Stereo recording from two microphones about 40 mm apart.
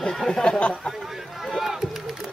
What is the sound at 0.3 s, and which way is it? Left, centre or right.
Speech, left.